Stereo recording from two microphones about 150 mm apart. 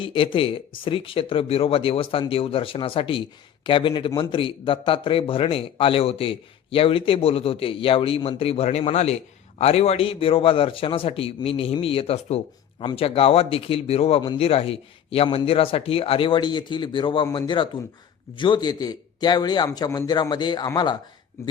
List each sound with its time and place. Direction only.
0.0 s a man's voice: 35° left (ahead or behind)